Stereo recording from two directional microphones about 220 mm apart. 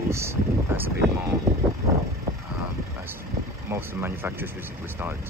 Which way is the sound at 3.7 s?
10° right (ahead or behind).